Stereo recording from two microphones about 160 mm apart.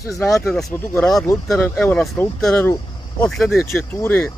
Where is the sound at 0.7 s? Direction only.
15° left (ahead or behind).